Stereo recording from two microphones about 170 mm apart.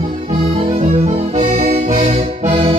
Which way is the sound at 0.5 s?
35° right (ahead or behind).